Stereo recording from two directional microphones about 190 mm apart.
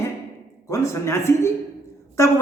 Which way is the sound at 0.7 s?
15° left (ahead or behind).